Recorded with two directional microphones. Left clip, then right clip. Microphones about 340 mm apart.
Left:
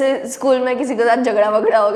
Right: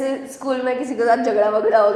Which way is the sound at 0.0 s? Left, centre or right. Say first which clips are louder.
Left 7 dB; left.